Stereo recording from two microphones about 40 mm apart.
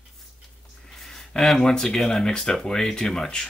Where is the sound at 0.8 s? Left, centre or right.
Centre.